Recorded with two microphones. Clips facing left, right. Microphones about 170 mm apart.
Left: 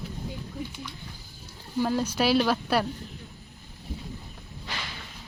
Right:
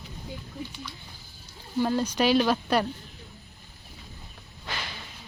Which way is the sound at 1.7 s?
5° left (ahead or behind).